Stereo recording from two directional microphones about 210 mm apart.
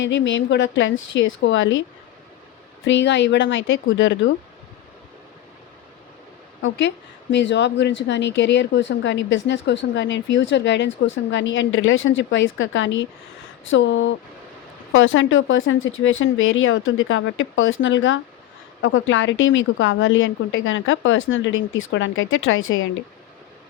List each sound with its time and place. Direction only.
0.0 s a woman's voice: 60° left (ahead or behind)
2.8 s a woman's voice: 60° left (ahead or behind)
6.6 s a woman's voice: 65° left (ahead or behind)